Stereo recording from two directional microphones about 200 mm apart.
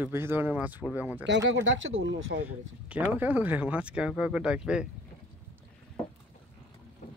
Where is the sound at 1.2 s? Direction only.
65° right (ahead or behind).